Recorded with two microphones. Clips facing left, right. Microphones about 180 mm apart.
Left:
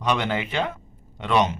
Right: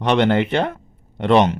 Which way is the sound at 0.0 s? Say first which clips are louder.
Right 8 dB; 65° right (ahead or behind).